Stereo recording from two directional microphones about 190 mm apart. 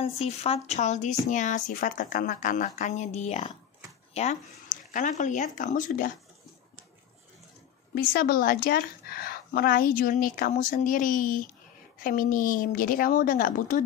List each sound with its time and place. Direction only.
0.0 s a woman's voice: 30° left (ahead or behind)
7.9 s a woman's voice: 50° left (ahead or behind)